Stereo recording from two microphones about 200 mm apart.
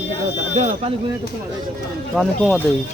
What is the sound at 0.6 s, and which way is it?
Speech, 35° right (ahead or behind).